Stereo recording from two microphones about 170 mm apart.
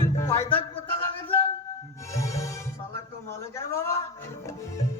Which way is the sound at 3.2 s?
15° left (ahead or behind).